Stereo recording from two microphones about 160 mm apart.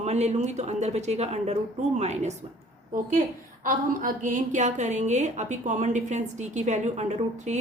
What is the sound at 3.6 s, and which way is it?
A woman's voice, 55° right (ahead or behind).